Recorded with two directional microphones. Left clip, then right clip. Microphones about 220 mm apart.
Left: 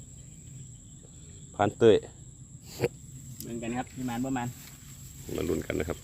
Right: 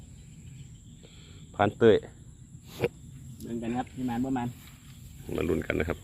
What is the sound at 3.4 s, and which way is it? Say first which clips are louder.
Speech: right 2 dB; 20° left (ahead or behind).